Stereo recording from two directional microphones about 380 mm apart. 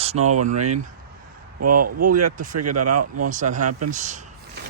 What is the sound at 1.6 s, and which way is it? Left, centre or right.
Speech, right.